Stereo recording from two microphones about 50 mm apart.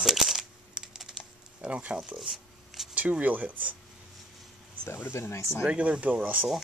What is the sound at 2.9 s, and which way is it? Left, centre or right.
Speech, right.